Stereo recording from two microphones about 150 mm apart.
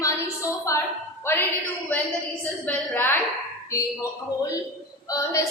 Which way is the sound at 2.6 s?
15° left (ahead or behind).